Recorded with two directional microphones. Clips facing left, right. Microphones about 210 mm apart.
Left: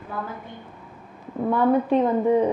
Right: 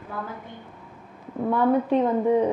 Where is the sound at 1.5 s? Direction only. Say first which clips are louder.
Left 1 dB; 25° left (ahead or behind).